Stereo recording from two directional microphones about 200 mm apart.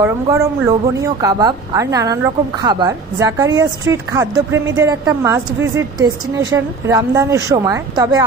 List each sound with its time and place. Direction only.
0.0 s a woman's voice: 15° right (ahead or behind)